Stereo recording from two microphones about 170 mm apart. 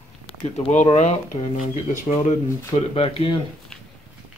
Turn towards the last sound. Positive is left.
turn(degrees=30)  # may be behind; listen again after turning